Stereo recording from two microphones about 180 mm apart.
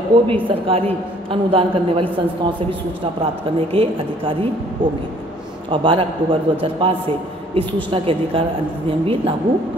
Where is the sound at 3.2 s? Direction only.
30° right (ahead or behind).